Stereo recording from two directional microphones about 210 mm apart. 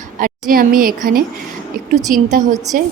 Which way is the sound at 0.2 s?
40° right (ahead or behind).